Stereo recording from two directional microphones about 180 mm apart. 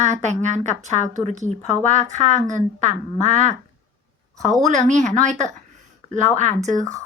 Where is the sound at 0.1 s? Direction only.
40° right (ahead or behind).